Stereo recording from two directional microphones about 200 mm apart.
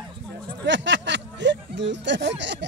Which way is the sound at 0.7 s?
60° right (ahead or behind).